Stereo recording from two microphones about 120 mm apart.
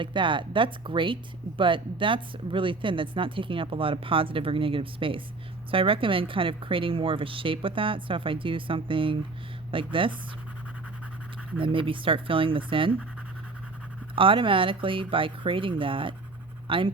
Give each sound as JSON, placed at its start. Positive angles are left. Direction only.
{"t": 0.0, "sound": "speech", "side_deg": -45}
{"t": 11.6, "sound": "speech", "side_deg": -45}
{"t": 14.2, "sound": "speech", "side_deg": -45}